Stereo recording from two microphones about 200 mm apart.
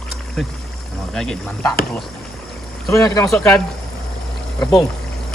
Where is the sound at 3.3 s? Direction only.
5° left (ahead or behind).